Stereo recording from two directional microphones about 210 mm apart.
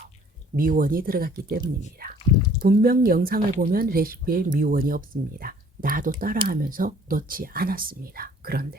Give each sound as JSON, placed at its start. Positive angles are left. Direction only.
{"t": 0.5, "sound": "speech", "side_deg": -40}